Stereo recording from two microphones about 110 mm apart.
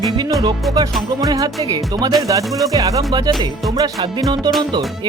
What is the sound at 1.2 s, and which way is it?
Speech, 35° right (ahead or behind).